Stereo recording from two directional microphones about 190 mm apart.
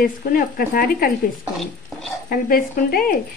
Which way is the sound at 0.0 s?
50° left (ahead or behind).